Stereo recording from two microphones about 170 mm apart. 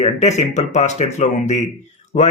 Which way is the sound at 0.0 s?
40° left (ahead or behind).